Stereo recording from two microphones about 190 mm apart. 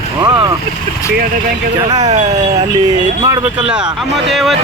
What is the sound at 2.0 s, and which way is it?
Speech, 35° right (ahead or behind).